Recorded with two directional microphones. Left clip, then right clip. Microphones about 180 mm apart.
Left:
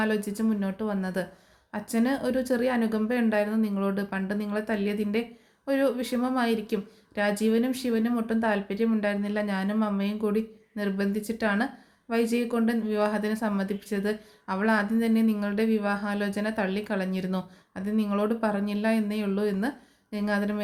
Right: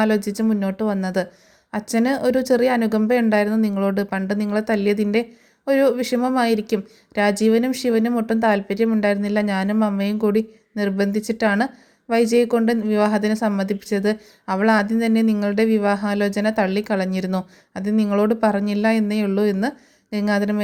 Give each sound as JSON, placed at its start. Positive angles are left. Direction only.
{"t": 0.0, "sound": "speech", "side_deg": -40}